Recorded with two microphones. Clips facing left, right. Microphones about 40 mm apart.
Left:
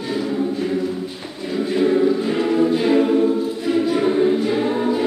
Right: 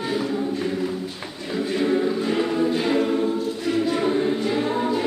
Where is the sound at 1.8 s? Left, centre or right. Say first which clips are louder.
Left 5 dB; centre.